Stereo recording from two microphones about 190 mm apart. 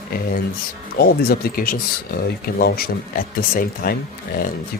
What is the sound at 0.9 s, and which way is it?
Speech, 55° left (ahead or behind).